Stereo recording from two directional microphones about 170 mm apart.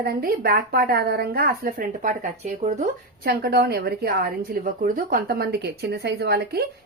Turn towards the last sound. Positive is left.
turn(degrees=-70)  # may be behind; listen again after turning